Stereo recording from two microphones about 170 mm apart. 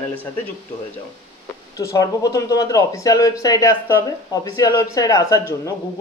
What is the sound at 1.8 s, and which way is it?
A man's voice, 20° left (ahead or behind).